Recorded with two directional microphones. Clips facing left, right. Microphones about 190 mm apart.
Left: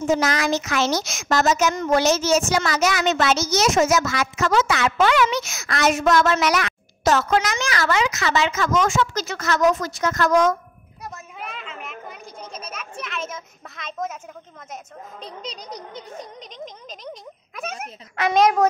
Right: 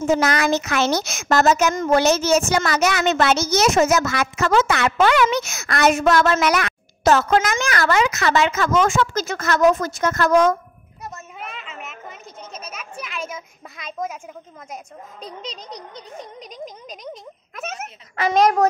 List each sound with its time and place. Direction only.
0.1 s a woman's voice: 60° right (ahead or behind)
11.1 s a sound: centre (ahead or behind)
13.0 s a child's voice: 10° right (ahead or behind)
16.3 s speech: 5° right (ahead or behind)